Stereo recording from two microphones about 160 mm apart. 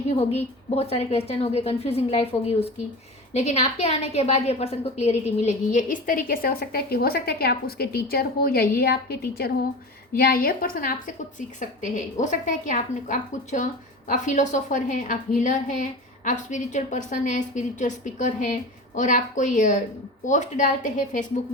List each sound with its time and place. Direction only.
0.1 s a woman's voice: 40° left (ahead or behind); by 9.6 s 80° left
10.2 s a woman's voice: 70° left (ahead or behind); by 21.4 s 50° left (ahead or behind)